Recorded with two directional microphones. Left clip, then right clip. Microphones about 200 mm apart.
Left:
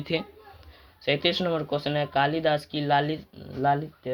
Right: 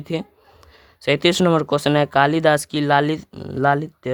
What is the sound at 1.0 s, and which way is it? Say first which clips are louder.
Speech: right 8 dB; 45° right (ahead or behind).